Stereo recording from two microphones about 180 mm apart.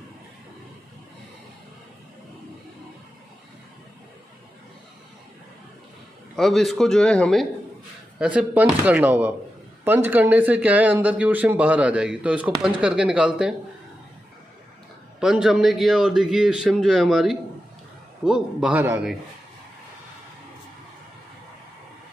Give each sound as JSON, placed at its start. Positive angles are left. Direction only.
{"t": 6.3, "sound": "a man's voice", "side_deg": 0}
{"t": 15.1, "sound": "a man's voice", "side_deg": -5}